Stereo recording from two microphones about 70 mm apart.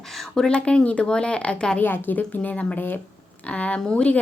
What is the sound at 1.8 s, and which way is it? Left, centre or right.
A woman's voice, left.